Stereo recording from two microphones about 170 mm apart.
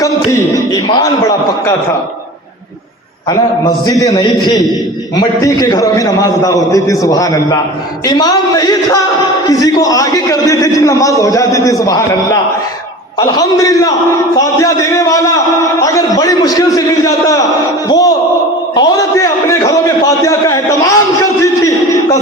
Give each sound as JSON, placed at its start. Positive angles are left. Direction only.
{"t": 0.3, "sound": "a man's voice", "side_deg": 20}
{"t": 3.8, "sound": "a man's voice", "side_deg": 20}
{"t": 18.8, "sound": "a sound", "side_deg": 20}